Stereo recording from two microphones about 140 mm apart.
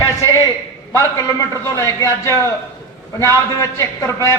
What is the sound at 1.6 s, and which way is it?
A man's voice, 20° left (ahead or behind).